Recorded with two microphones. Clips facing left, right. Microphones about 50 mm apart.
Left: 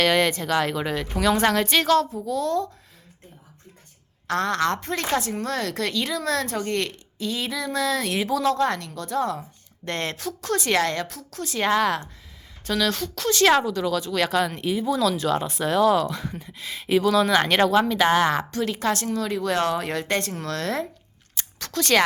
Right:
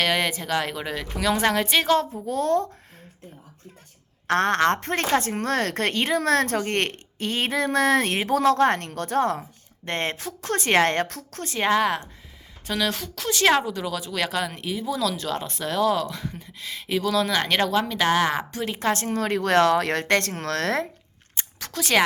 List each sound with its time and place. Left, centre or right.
0.0 s speech: centre
2.2 s a woman's voice: right
4.3 s a woman's voice: right
9.8 s a woman's voice: right
11.4 s a woman's voice: right
11.7 s speech: centre
18.3 s a woman's voice: centre
19.1 s speech: right
21.6 s speech: centre